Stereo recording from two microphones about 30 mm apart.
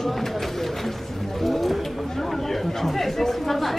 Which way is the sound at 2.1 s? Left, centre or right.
Centre.